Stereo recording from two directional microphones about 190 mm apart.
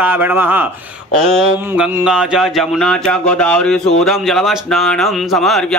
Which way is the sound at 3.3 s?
5° left (ahead or behind).